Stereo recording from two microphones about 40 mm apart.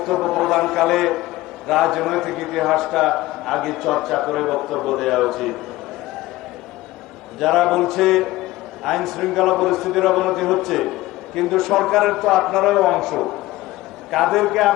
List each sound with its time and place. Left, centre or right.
0.0 s a man's voice: centre
7.3 s a man's voice: centre